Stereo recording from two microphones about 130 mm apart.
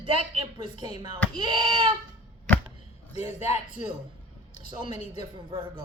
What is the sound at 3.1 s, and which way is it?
Speech, 60° left (ahead or behind).